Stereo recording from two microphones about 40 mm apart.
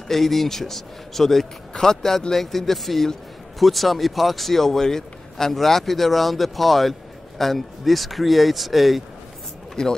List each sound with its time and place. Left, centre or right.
0.1 s a man's voice: centre
9.8 s a man's voice: centre